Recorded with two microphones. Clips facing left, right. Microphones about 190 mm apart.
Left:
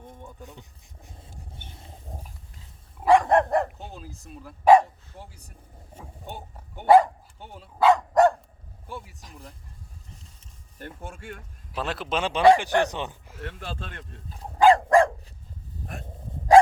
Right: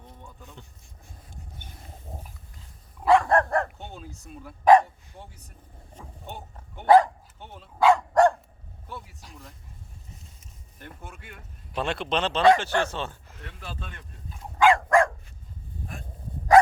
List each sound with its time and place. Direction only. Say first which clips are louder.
0.2 s a sound: left 3 dB; 15° left (ahead or behind)
1.2 s a sound: even; 25° left (ahead or behind)
3.0 s dog: left 1 dB; 15° left (ahead or behind)
3.8 s dog: even; centre (ahead or behind)
11.7 s speech: right 1 dB; centre (ahead or behind)
14.3 s dog: left 3 dB; 35° left (ahead or behind)